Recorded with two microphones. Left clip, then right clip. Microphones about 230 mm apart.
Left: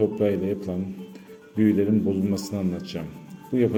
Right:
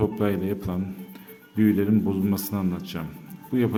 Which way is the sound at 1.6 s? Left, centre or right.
Centre.